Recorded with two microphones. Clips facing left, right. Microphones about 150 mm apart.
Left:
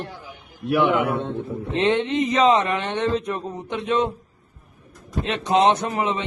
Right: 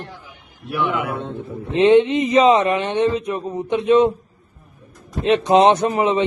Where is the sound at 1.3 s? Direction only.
10° right (ahead or behind).